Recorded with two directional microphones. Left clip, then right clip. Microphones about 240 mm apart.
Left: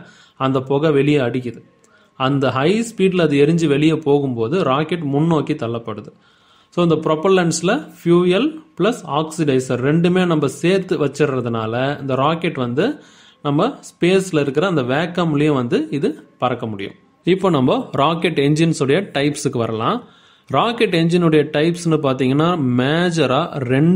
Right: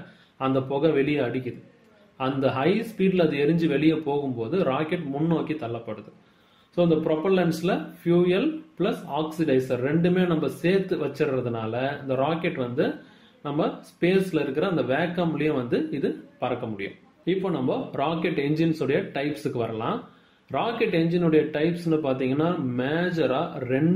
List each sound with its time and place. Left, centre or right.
0.4 s speech: left